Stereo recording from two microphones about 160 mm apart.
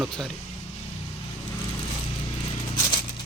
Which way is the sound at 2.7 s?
30° left (ahead or behind).